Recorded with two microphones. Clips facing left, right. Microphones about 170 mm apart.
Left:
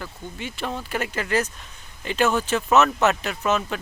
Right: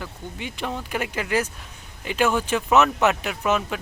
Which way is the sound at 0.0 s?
15° right (ahead or behind).